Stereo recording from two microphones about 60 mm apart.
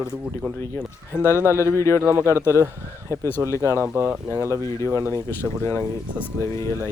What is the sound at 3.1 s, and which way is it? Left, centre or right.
Speech, right.